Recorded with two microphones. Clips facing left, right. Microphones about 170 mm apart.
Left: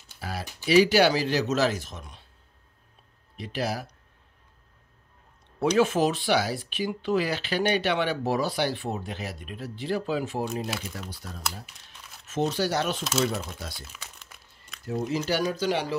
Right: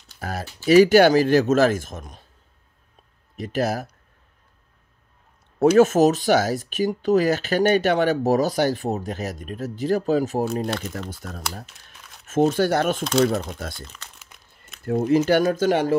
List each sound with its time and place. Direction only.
0.2 s a sound: 45° right (ahead or behind)
0.7 s speech: 50° right (ahead or behind)
3.3 s speech: 45° right (ahead or behind)
5.8 s speech: 45° right (ahead or behind)
13.7 s crumpling: 5° left (ahead or behind)
14.9 s speech: 55° right (ahead or behind)